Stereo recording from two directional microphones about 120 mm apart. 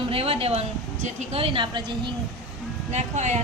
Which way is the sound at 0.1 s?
55° right (ahead or behind).